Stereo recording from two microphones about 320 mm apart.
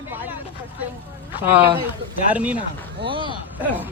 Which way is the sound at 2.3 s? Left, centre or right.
Centre.